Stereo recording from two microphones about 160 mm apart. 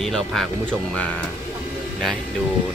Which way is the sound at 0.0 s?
Centre (ahead or behind).